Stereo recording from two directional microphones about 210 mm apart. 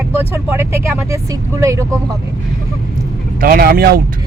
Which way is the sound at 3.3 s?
45° right (ahead or behind).